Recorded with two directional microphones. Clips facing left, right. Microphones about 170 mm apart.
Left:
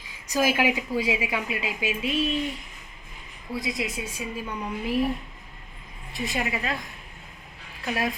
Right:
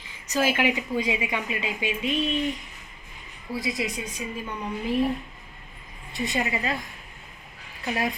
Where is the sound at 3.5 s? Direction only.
Centre (ahead or behind).